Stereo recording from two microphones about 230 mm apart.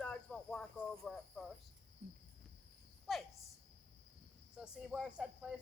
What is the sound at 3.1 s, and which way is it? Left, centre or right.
Speech, centre.